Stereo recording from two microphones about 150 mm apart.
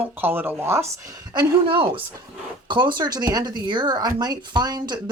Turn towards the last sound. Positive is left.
turn(degrees=-30)  # may be behind; listen again after turning